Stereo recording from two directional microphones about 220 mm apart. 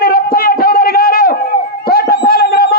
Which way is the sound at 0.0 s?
40° left (ahead or behind).